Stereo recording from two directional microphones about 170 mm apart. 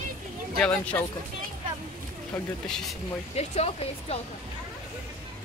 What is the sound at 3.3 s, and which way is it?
Speech, 40° left (ahead or behind).